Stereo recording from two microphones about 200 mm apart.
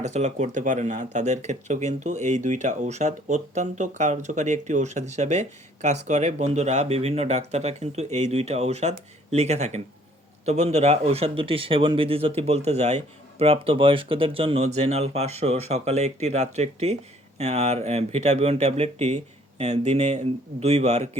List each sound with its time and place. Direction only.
0.0 s speech: 35° right (ahead or behind)